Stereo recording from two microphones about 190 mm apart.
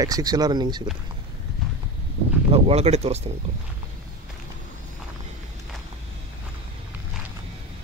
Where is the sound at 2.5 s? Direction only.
30° right (ahead or behind).